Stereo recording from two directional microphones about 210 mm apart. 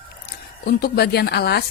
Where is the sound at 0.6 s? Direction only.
45° left (ahead or behind).